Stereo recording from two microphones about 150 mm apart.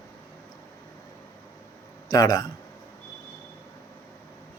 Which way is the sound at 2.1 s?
25° left (ahead or behind).